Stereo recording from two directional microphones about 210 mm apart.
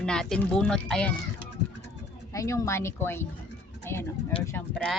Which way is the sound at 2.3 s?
15° left (ahead or behind).